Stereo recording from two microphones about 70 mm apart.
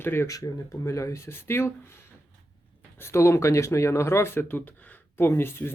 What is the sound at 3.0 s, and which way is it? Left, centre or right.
Speech, left.